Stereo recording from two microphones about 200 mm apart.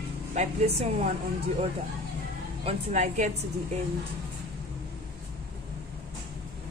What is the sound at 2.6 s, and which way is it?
Speech, 35° right (ahead or behind).